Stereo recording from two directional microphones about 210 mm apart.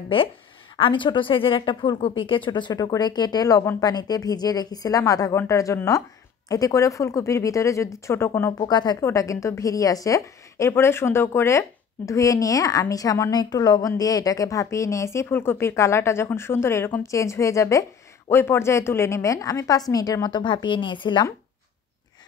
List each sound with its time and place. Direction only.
0.7 s a woman's voice: 25° left (ahead or behind)